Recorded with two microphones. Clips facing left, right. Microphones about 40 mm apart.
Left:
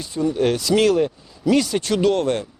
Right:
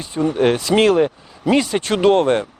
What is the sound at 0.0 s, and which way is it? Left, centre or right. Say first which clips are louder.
Speech: right 3 dB; right.